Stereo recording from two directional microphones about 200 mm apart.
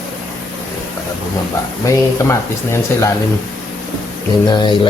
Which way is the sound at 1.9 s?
15° left (ahead or behind).